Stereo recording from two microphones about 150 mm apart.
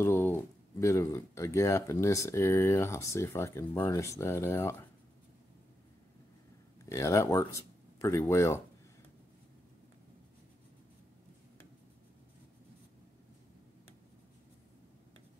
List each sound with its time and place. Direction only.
0.0 s speech: 15° left (ahead or behind)
6.9 s speech: 20° left (ahead or behind)